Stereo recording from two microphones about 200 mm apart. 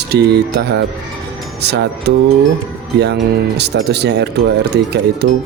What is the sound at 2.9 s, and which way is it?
Speech, 55° right (ahead or behind).